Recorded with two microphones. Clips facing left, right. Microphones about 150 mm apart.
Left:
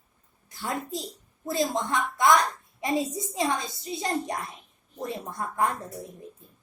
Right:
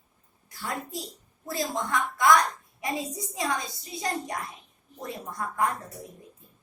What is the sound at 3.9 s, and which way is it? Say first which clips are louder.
A woman's voice: left 2 dB; 25° left (ahead or behind).